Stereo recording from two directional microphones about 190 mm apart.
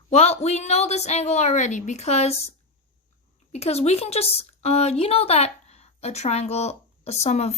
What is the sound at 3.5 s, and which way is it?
A woman's voice, 35° left (ahead or behind).